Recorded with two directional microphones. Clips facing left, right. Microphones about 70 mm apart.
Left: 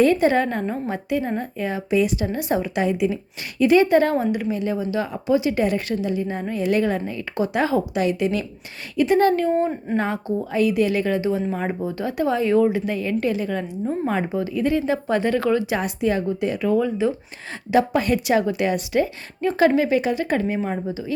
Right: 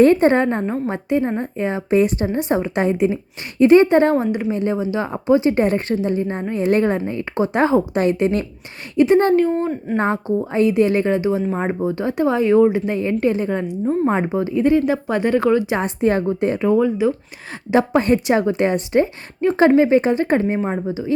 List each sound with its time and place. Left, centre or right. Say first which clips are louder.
0.0 s a woman's voice: right 4 dB; right
0.4 s a woman's voice: right 4 dB; right
2.3 s a woman's voice: right 3 dB; right
4.5 s a woman's voice: right 3 dB; right
9.0 s speech: right 5 dB; right
9.6 s speech: even; centre
10.0 s a woman's voice: right 7 dB; right
11.2 s speech: right 3 dB; centre
14.8 s speech: right 3 dB; centre; by 16.6 s right
16.6 s speech: right 3 dB; centre
17.7 s a woman's voice: right 3 dB; right
20.6 s speech: right 3 dB; right